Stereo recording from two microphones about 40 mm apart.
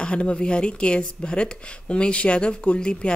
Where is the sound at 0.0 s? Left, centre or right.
Left.